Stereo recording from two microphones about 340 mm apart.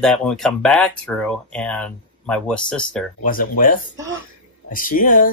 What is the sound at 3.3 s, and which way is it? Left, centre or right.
Speech, left.